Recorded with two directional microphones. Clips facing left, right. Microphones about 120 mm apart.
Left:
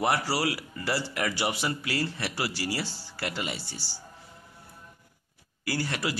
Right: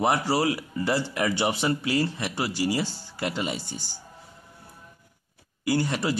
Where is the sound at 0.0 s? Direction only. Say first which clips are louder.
Right 4 dB; 20° right (ahead or behind).